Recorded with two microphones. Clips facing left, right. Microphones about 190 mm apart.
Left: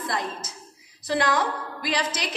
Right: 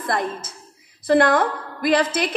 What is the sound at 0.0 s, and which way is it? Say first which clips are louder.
A woman's voice: right 5 dB; 55° right (ahead or behind).